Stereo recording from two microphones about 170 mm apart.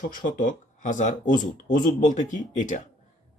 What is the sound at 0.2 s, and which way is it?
Speech, 50° left (ahead or behind).